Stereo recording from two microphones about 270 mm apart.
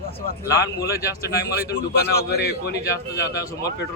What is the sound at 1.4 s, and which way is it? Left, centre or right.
A man's voice, left.